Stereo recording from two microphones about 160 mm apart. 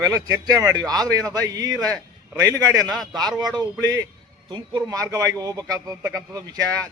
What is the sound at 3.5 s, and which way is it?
A man's voice, 20° right (ahead or behind).